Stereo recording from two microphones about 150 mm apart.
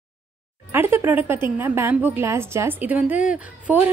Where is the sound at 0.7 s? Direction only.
15° right (ahead or behind).